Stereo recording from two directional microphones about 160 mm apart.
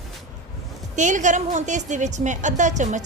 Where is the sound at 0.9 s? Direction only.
50° right (ahead or behind).